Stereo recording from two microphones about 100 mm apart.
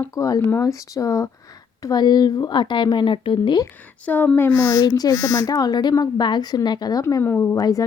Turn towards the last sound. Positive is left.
turn(degrees=35)  # may be behind; listen again after turning